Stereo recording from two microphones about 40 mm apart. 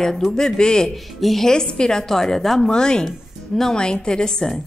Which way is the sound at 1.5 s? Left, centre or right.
Left.